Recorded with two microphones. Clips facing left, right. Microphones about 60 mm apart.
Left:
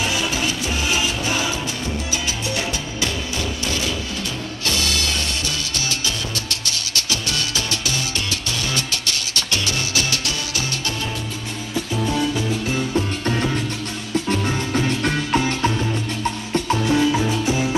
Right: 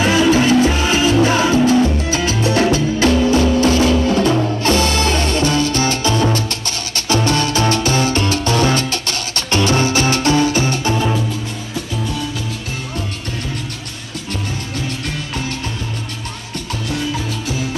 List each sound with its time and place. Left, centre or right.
0.0 s music: right
16.8 s music: left